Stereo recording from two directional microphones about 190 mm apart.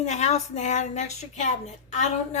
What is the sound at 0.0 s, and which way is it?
A woman's voice, 35° left (ahead or behind).